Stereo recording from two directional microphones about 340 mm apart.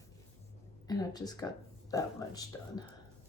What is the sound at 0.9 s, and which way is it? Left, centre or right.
Speech, centre.